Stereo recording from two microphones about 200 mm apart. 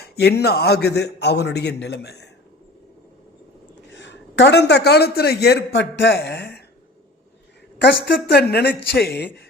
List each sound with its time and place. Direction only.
0.0 s a man's voice: 55° left (ahead or behind)
3.9 s a man's voice: 65° left (ahead or behind)
7.8 s a man's voice: 55° left (ahead or behind)